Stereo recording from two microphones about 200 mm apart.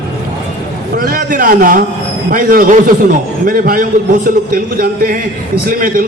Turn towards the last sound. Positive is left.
turn(degrees=-45)  # may be behind; listen again after turning